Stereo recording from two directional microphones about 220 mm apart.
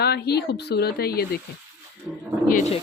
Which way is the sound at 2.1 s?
5° right (ahead or behind).